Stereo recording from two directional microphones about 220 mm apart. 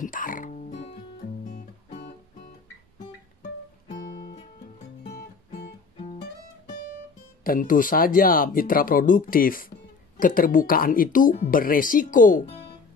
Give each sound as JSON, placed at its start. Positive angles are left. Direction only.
{"t": 0.0, "sound": "music", "side_deg": 40}
{"t": 7.4, "sound": "speech", "side_deg": 40}